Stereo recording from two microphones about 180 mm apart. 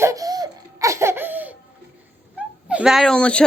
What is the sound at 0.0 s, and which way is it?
Laughter, 20° right (ahead or behind).